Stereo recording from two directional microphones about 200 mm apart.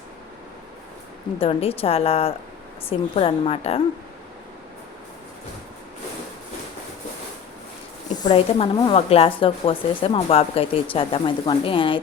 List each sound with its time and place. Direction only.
1.4 s speech: 30° left (ahead or behind)
8.2 s speech: 25° left (ahead or behind)